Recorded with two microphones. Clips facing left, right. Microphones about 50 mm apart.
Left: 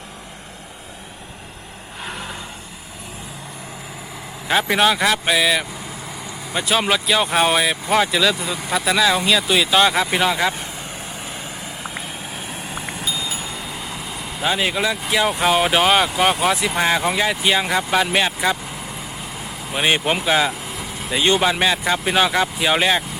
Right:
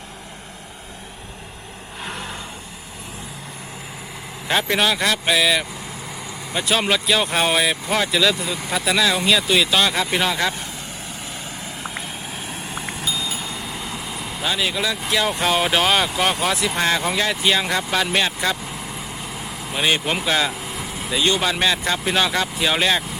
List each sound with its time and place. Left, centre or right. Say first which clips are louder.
2.0 s vehicle: even; centre
4.4 s speech: left 3 dB; centre
11.6 s vehicle: even; centre
14.4 s speech: left 3 dB; centre
19.8 s speech: left 2 dB; centre
20.6 s vehicle: even; centre
21.3 s speech: left 2 dB; centre